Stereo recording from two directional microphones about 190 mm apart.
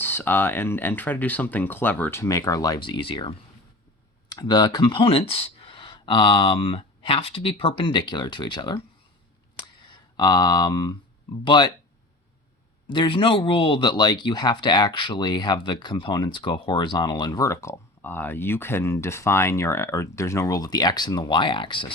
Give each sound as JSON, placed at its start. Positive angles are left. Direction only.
{"t": 0.0, "sound": "speech", "side_deg": 10}
{"t": 9.8, "sound": "speech", "side_deg": 20}
{"t": 12.9, "sound": "speech", "side_deg": 25}